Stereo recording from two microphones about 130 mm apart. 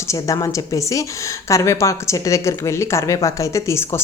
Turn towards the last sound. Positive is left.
turn(degrees=20)  # may be behind; listen again after turning